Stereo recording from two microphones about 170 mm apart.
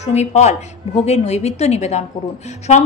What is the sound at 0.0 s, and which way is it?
A woman's voice, 40° left (ahead or behind).